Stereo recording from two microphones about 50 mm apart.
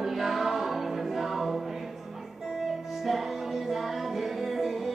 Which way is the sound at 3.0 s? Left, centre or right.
Centre.